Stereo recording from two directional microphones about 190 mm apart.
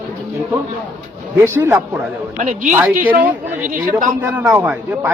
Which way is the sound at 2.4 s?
45° right (ahead or behind).